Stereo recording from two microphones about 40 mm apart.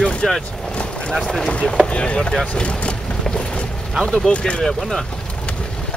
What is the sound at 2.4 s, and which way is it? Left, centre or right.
Vehicle, left.